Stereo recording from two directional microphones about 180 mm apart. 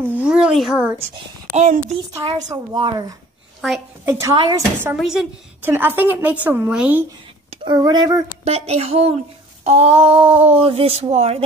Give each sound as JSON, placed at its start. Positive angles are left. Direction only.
{"t": 0.0, "sound": "a sound", "side_deg": -5}
{"t": 1.5, "sound": "a child's voice", "side_deg": -40}
{"t": 2.2, "sound": "a woman's voice", "side_deg": -25}
{"t": 4.9, "sound": "a woman's voice", "side_deg": 0}
{"t": 7.6, "sound": "a woman's voice", "side_deg": -25}
{"t": 8.5, "sound": "speech", "side_deg": -35}